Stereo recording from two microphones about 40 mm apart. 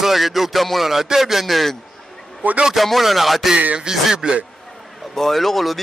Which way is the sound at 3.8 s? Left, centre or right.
Centre.